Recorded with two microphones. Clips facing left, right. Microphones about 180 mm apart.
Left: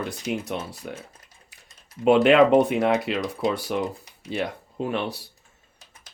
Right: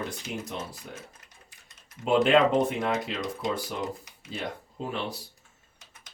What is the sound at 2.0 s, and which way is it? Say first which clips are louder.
Speech: left 5 dB; 75° left (ahead or behind).